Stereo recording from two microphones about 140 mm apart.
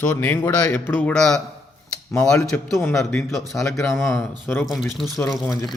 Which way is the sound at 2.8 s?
15° left (ahead or behind).